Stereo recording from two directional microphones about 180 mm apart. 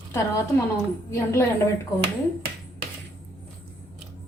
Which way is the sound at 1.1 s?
15° left (ahead or behind).